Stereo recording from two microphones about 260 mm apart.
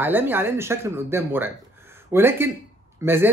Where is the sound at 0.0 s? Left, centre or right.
Centre.